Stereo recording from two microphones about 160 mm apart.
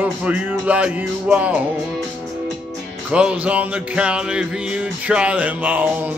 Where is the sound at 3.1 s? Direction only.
5° right (ahead or behind).